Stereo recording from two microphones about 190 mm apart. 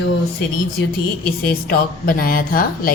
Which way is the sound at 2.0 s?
50° left (ahead or behind).